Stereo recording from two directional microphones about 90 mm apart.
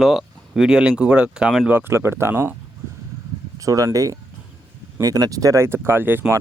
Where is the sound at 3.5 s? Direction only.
35° right (ahead or behind).